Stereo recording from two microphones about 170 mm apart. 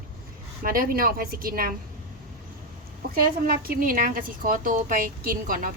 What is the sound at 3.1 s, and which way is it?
A woman's voice, 60° right (ahead or behind).